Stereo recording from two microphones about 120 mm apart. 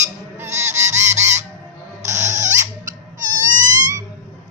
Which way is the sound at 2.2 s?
80° right.